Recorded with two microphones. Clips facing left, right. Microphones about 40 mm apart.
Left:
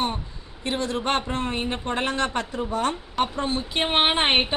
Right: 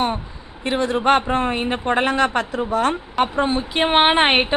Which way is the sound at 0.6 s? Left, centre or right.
Right.